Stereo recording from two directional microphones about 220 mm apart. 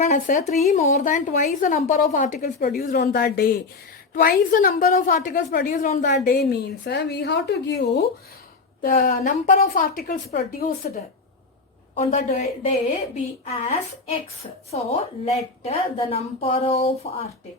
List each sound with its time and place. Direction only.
0.0 s a woman's voice: 35° left (ahead or behind); by 8.0 s 50° left (ahead or behind)
8.8 s a woman's voice: 40° left (ahead or behind)
11.9 s a woman's voice: 30° left (ahead or behind)